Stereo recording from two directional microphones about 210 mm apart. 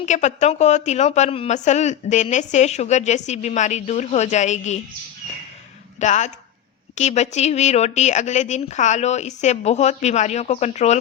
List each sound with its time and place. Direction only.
0.0 s a woman's voice: 35° left (ahead or behind)
6.0 s a woman's voice: 35° left (ahead or behind)